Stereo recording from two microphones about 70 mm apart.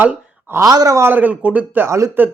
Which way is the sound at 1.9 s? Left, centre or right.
Right.